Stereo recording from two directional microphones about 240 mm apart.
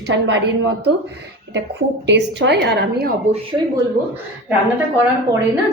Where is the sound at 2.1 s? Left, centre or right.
Right.